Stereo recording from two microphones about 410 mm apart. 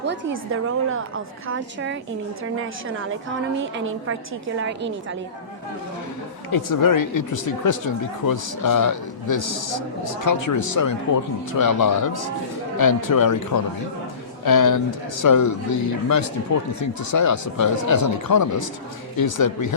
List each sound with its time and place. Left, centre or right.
0.0 s a woman's voice: right
6.5 s speech: left
9.2 s a man's voice: left